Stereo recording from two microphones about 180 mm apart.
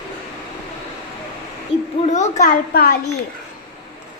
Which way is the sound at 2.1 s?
40° left (ahead or behind).